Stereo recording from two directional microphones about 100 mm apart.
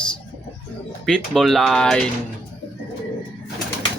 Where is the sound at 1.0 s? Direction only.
5° left (ahead or behind).